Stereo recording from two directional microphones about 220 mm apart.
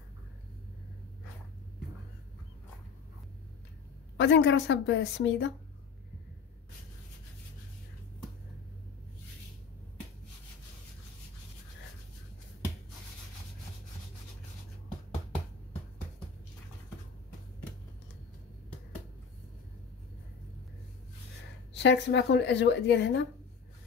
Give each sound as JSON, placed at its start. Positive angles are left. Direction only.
{"t": 4.2, "sound": "a woman's voice", "side_deg": 55}
{"t": 21.7, "sound": "a woman's voice", "side_deg": 50}